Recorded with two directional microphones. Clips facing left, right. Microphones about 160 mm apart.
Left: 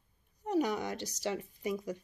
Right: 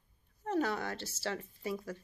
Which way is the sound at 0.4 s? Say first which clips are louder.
Left 2 dB; 15° left (ahead or behind).